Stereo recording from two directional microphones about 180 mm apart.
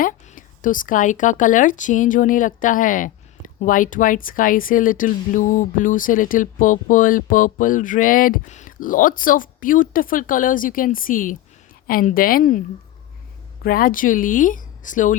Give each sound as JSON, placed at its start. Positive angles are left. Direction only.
{"t": 0.0, "sound": "speech", "side_deg": 50}
{"t": 13.6, "sound": "speech", "side_deg": 55}